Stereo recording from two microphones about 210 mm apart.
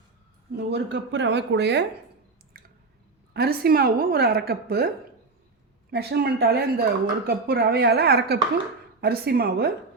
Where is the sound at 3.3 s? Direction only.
50° right (ahead or behind).